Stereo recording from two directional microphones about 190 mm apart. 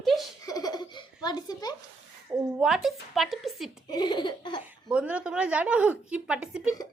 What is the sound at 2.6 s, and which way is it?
A woman's voice, centre (ahead or behind).